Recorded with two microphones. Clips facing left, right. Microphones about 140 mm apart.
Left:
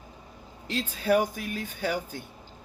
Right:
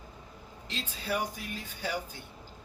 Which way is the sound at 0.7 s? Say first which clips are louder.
Left 10 dB; 50° left (ahead or behind).